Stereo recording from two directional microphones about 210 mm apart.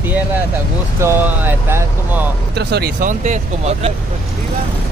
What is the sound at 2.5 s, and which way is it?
Speech, 50° right (ahead or behind).